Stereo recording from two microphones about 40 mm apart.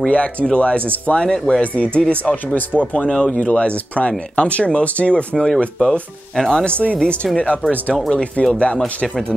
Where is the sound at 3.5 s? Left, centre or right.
Left.